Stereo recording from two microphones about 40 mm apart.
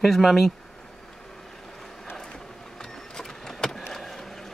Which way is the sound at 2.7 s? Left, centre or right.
Centre.